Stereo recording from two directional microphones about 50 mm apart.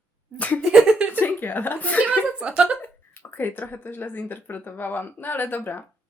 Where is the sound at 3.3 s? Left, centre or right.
Left.